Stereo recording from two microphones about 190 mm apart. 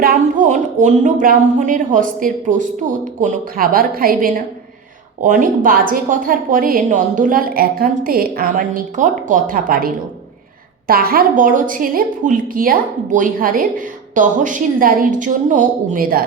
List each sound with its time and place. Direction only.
0.0 s a woman's voice: 45° right (ahead or behind)